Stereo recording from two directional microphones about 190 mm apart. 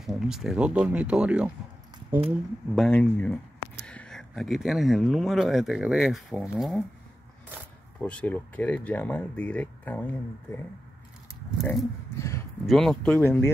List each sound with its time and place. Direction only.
0.0 s speech: centre (ahead or behind)
2.0 s speech: 30° right (ahead or behind)
2.7 s speech: 5° left (ahead or behind)
8.0 s speech: 5° left (ahead or behind)
12.2 s a sound: 15° left (ahead or behind)
12.6 s speech: centre (ahead or behind)